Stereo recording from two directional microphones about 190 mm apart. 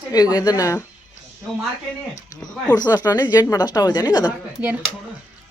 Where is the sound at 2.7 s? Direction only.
20° left (ahead or behind).